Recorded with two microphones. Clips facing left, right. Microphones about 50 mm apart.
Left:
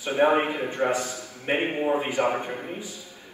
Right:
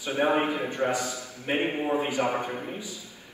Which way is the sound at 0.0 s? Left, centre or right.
Left.